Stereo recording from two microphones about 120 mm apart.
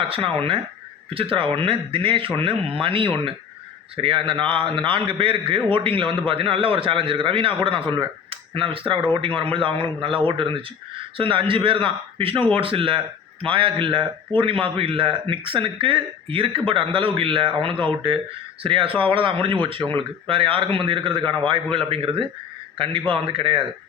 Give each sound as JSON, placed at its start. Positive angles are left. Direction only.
{"t": 0.1, "sound": "a man's voice", "side_deg": -50}